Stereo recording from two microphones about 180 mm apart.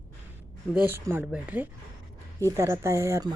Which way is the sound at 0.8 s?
10° right (ahead or behind).